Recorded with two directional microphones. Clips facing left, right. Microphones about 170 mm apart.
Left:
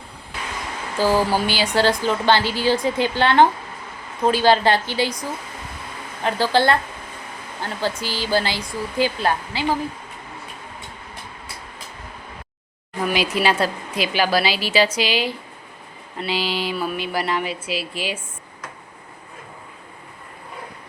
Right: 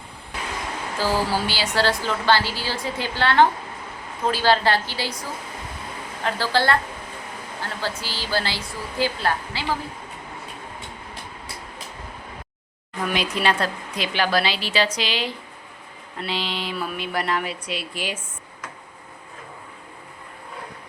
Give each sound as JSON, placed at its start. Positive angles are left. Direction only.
{"t": 0.9, "sound": "a woman's voice", "side_deg": 15}
{"t": 6.2, "sound": "a woman's voice", "side_deg": 20}
{"t": 13.0, "sound": "a woman's voice", "side_deg": 5}